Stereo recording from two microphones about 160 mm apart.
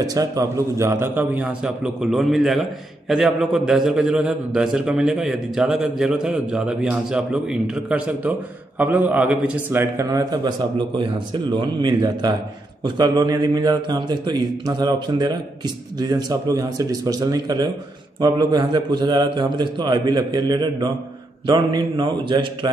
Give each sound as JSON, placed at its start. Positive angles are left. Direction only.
{"t": 0.0, "sound": "a man's voice", "side_deg": -20}